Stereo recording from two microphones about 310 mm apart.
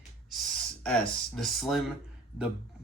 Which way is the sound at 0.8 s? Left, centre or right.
Centre.